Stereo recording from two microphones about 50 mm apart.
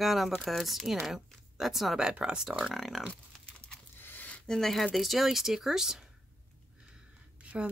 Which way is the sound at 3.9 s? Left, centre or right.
Left.